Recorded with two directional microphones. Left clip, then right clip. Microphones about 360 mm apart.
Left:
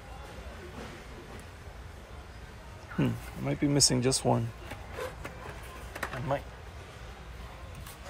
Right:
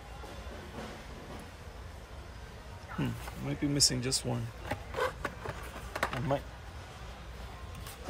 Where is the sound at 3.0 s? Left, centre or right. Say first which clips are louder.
Left 6 dB; centre.